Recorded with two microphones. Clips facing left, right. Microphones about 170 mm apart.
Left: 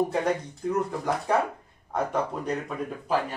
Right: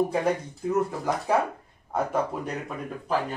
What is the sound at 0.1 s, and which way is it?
Speech, 5° right (ahead or behind).